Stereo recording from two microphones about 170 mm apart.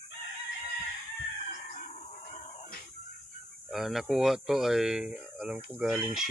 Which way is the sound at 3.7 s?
Centre (ahead or behind).